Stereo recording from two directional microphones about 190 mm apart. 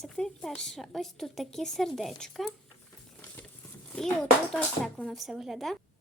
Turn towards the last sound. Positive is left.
turn(degrees=0)  # may be behind; listen again after turning